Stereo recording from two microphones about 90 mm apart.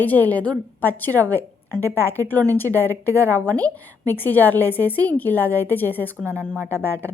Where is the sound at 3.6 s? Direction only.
20° left (ahead or behind).